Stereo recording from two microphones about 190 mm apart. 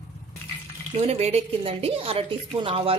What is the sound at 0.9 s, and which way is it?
A woman's voice, 35° right (ahead or behind).